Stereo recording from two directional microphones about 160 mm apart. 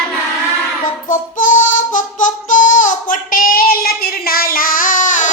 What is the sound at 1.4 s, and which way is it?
Music, 55° left (ahead or behind).